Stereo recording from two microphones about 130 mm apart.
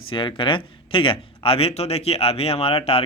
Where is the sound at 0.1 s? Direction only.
40° left (ahead or behind).